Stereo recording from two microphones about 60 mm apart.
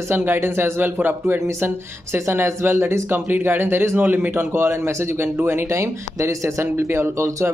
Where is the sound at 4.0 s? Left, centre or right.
Right.